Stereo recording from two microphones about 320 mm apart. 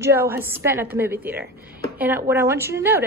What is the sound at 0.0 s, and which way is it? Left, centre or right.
Speech, centre.